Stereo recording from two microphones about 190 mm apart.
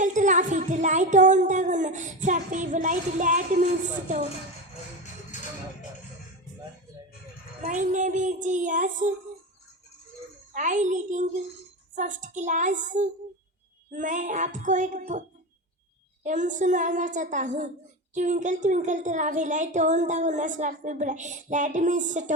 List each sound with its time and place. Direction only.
0.0 s speech: 40° right (ahead or behind)
5.3 s music: 40° left (ahead or behind)
7.6 s speech: 40° right (ahead or behind)
10.5 s speech: 40° right (ahead or behind)
16.2 s speech: 40° right (ahead or behind)